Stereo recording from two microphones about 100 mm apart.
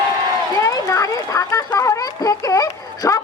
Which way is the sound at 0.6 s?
35° left (ahead or behind).